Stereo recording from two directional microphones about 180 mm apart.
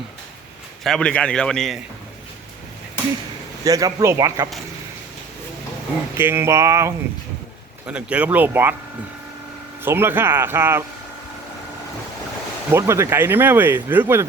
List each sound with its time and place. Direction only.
0.9 s a man's voice: 5° left (ahead or behind)
3.6 s speech: 20° right (ahead or behind)
6.1 s speech: 15° right (ahead or behind)
9.8 s speech: 10° right (ahead or behind)
12.7 s speech: 15° right (ahead or behind)